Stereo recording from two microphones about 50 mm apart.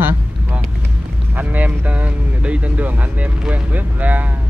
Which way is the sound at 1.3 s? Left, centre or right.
Right.